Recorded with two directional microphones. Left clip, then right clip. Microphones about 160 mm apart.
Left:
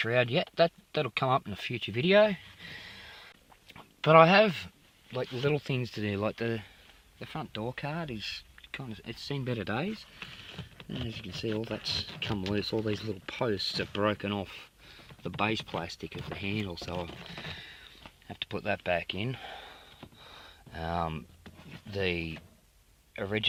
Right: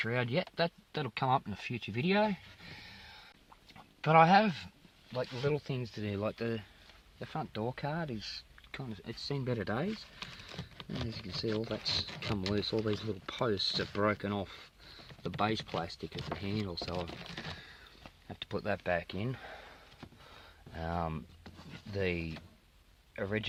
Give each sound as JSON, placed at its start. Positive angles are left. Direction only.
{"t": 0.0, "sound": "speech", "side_deg": 40}
{"t": 3.8, "sound": "speech", "side_deg": 45}
{"t": 5.1, "sound": "speech", "side_deg": 65}
{"t": 7.2, "sound": "speech", "side_deg": 15}
{"t": 11.2, "sound": "speech", "side_deg": 15}
{"t": 20.4, "sound": "a sound", "side_deg": 25}
{"t": 23.1, "sound": "speech", "side_deg": 25}